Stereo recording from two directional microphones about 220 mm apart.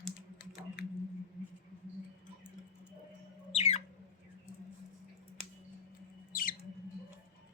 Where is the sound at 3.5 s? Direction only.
30° left (ahead or behind).